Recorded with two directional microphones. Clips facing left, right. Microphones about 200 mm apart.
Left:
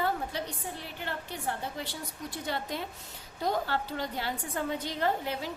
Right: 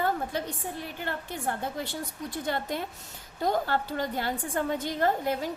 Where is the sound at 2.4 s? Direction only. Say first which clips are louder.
Right 3 dB; 50° right (ahead or behind).